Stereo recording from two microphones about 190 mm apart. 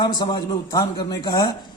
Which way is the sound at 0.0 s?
20° left (ahead or behind).